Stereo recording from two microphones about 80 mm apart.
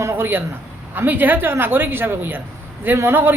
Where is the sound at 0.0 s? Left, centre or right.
Right.